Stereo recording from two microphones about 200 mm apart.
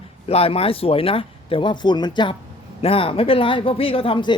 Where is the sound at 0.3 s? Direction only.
30° left (ahead or behind).